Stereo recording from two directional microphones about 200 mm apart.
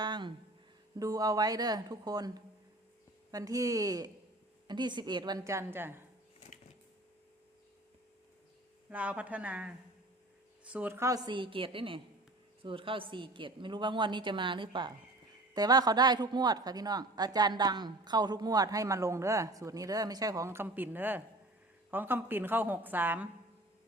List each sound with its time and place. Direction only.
0.0 s music: 20° right (ahead or behind)
0.9 s a woman's voice: 15° right (ahead or behind)
8.9 s a woman's voice: 5° right (ahead or behind)